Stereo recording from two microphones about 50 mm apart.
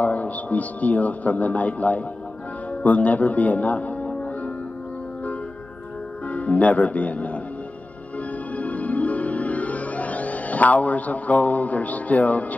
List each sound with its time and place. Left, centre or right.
0.0 s a man's voice: left
6.2 s speech: left
8.5 s music: left